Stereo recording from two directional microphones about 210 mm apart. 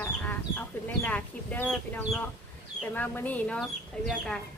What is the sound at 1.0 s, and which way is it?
Speech, 5° left (ahead or behind).